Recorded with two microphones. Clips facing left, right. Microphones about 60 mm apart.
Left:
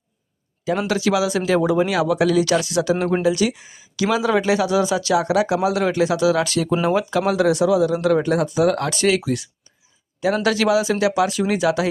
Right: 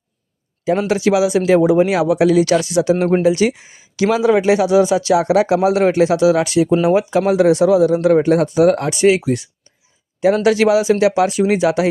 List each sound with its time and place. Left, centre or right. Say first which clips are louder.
0.9 s speech: right 4 dB; right
8.9 s speech: right 5 dB; centre